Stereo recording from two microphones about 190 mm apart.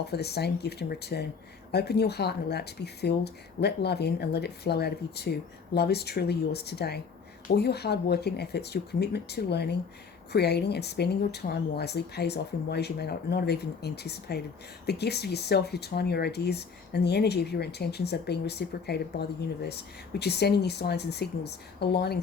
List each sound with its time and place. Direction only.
0.0 s speech: 60° left (ahead or behind)